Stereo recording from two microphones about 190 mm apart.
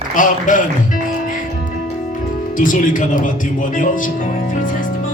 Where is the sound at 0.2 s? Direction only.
45° left (ahead or behind).